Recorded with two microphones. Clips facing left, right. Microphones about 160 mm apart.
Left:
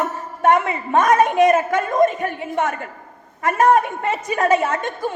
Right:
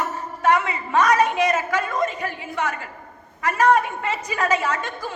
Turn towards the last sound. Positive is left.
turn(degrees=50)  # may be behind; listen again after turning